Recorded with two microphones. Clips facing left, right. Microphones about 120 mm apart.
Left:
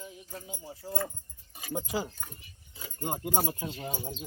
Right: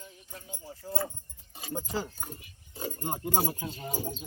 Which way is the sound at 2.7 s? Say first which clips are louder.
Right 11 dB; 45° right (ahead or behind).